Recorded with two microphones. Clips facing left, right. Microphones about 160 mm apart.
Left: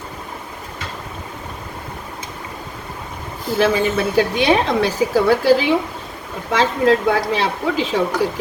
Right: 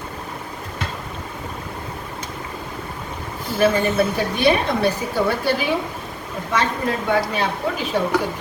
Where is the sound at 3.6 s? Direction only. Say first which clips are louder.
Right 1 dB; 90° left.